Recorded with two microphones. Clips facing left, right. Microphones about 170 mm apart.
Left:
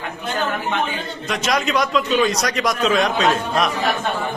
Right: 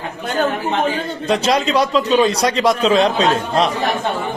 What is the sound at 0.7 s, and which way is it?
A man's voice, 30° right (ahead or behind).